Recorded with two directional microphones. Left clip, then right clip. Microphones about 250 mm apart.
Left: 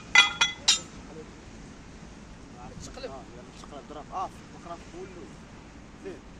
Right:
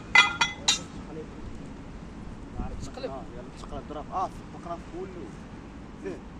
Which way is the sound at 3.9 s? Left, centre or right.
Centre.